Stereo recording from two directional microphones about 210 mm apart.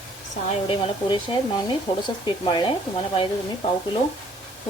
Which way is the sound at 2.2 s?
20° left (ahead or behind).